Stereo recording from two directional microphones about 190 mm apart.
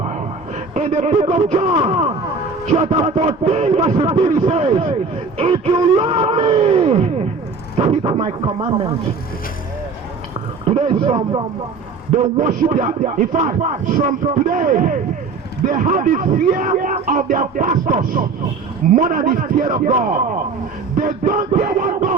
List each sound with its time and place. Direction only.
0.0 s a man's voice: 35° right (ahead or behind)
10.8 s speech: 30° right (ahead or behind)